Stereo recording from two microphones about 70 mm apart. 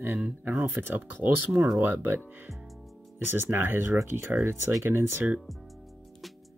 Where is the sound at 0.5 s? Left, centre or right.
Right.